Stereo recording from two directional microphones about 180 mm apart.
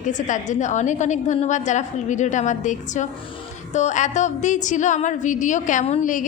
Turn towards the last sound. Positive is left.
turn(degrees=45)  # may be behind; listen again after turning